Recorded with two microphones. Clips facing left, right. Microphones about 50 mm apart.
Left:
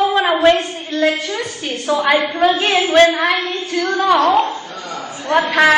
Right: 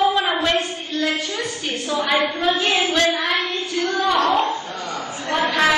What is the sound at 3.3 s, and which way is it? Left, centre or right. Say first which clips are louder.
Child singing: left 3 dB; left.